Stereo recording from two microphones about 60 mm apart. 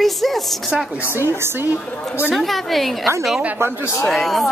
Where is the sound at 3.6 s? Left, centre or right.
Right.